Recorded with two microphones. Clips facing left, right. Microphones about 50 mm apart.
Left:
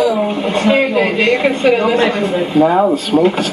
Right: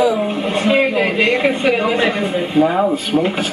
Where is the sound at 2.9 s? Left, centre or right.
Centre.